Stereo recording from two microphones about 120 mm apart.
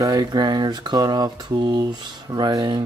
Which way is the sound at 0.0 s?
35° right (ahead or behind).